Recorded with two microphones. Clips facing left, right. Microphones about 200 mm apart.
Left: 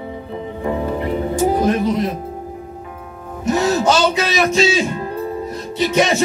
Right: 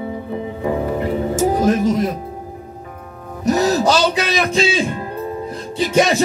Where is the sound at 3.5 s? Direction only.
35° right (ahead or behind).